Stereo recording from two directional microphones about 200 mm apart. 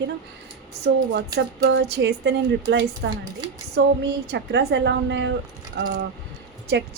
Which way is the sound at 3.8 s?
65° right (ahead or behind).